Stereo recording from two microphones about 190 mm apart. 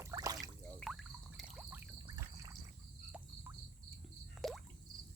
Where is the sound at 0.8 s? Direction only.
Centre (ahead or behind).